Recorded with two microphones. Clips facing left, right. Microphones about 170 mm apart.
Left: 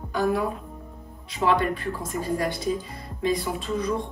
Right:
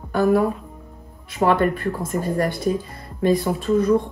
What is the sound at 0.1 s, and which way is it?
Speech, 60° right (ahead or behind).